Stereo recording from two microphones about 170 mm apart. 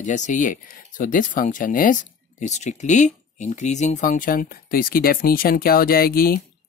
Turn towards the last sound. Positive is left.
turn(degrees=60)  # may be behind; listen again after turning